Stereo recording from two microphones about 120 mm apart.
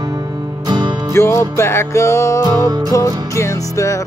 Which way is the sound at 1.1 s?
25° left (ahead or behind).